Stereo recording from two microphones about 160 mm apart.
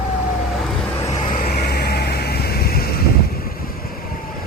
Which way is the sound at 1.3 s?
65° left (ahead or behind).